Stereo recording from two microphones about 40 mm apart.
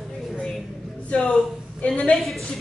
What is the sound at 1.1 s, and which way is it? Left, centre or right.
Speech, left.